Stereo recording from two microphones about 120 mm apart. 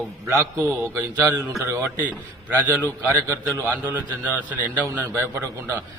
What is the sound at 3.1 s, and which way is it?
A man's voice, 25° right (ahead or behind).